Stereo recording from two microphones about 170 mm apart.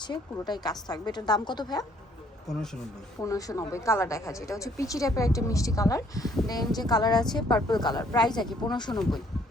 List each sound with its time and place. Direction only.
0.0 s a woman's voice: 25° left (ahead or behind)
2.5 s speech: centre (ahead or behind)
3.2 s a woman's voice: 20° left (ahead or behind)
9.0 s speech: centre (ahead or behind)